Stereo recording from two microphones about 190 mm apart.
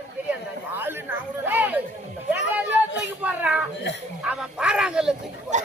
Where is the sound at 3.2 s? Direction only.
5° right (ahead or behind).